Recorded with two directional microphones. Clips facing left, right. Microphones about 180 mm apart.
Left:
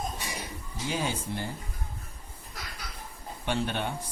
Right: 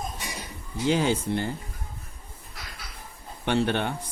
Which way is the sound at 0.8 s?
70° right (ahead or behind).